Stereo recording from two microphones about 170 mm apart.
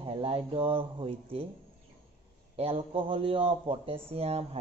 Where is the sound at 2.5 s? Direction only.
35° right (ahead or behind).